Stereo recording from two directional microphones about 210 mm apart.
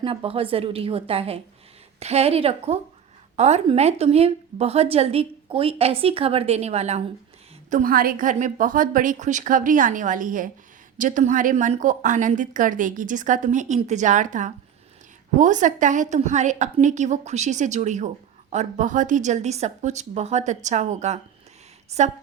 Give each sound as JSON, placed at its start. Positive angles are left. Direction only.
{"t": 0.0, "sound": "a woman's voice", "side_deg": -25}